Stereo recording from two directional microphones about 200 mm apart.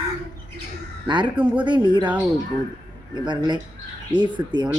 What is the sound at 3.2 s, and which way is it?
Speech, 20° right (ahead or behind).